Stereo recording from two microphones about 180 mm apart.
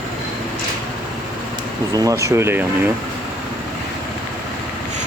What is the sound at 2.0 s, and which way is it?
Speech, 15° right (ahead or behind).